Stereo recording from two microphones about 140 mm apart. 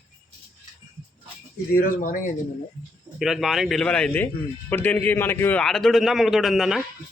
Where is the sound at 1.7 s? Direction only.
85° left.